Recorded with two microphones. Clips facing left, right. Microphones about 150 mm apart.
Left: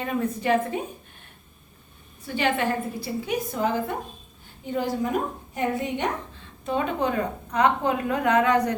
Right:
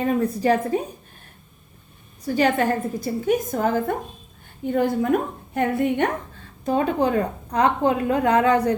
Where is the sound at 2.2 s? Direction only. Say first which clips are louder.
Right 5 dB; 40° right (ahead or behind).